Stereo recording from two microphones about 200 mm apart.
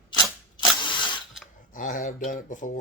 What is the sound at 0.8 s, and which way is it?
Ratchet, 25° left (ahead or behind).